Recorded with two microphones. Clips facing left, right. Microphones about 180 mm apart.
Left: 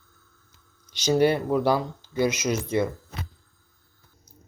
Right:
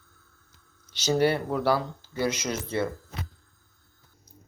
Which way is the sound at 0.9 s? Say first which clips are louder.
Left 3 dB; 15° left (ahead or behind).